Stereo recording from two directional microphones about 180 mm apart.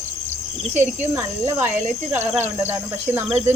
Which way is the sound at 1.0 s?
15° right (ahead or behind).